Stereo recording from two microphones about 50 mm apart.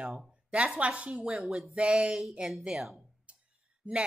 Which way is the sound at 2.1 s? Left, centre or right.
Centre.